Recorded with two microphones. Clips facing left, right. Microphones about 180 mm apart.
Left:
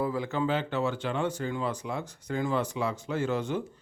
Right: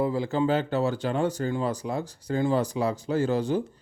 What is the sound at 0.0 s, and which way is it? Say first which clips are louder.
Speech: right 4 dB; 30° right (ahead or behind).